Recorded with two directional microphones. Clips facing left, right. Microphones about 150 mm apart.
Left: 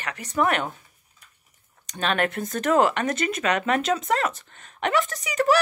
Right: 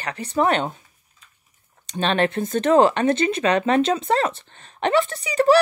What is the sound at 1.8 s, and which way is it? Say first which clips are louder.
Speech: right 4 dB; 30° right (ahead or behind).